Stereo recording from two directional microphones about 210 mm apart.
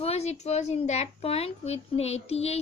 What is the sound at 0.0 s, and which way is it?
A woman's voice, 30° left (ahead or behind).